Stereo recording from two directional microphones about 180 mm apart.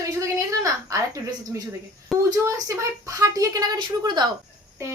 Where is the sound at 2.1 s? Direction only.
Centre (ahead or behind).